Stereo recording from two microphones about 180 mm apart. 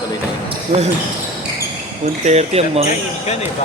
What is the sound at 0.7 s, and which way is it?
Speech, 35° right (ahead or behind).